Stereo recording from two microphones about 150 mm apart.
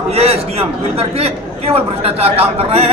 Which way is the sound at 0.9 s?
40° right (ahead or behind).